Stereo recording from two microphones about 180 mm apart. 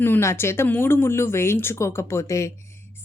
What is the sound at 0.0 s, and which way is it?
Speech, 15° left (ahead or behind).